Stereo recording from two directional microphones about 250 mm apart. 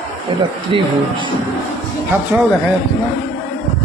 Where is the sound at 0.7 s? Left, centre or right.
Centre.